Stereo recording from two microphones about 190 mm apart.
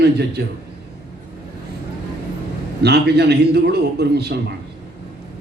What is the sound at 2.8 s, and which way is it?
A man's voice, 60° right (ahead or behind).